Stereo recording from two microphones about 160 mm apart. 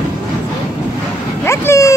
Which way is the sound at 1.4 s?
20° left (ahead or behind).